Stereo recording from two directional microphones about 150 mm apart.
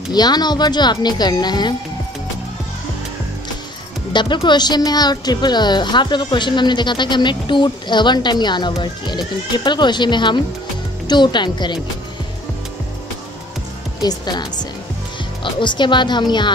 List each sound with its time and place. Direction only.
0.1 s speech: 25° left (ahead or behind)
4.1 s a woman's voice: 30° left (ahead or behind)
14.0 s a woman's voice: 25° left (ahead or behind)